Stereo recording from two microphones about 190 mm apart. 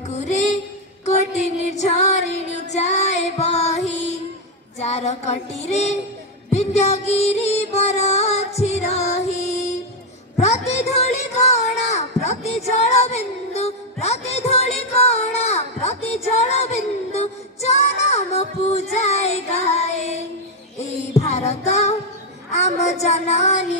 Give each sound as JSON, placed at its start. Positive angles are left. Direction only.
{"t": 1.7, "sound": "child singing", "side_deg": 35}
{"t": 2.7, "sound": "music", "side_deg": 35}
{"t": 4.7, "sound": "child singing", "side_deg": 35}
{"t": 6.5, "sound": "music", "side_deg": 35}
{"t": 10.4, "sound": "a sound", "side_deg": 35}
{"t": 14.0, "sound": "music", "side_deg": 35}
{"t": 21.1, "sound": "child singing", "side_deg": 35}
{"t": 22.5, "sound": "a sound", "side_deg": 35}
{"t": 23.0, "sound": "child singing", "side_deg": 35}